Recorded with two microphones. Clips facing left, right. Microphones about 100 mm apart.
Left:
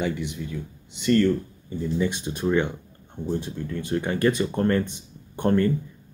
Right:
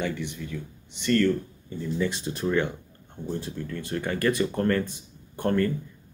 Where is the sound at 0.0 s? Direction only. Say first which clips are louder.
Left 3 dB; 15° left (ahead or behind).